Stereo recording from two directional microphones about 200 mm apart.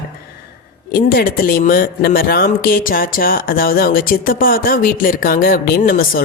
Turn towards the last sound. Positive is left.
turn(degrees=45)  # may be behind; listen again after turning